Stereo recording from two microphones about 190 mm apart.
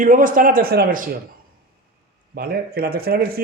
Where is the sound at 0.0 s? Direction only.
45° right (ahead or behind).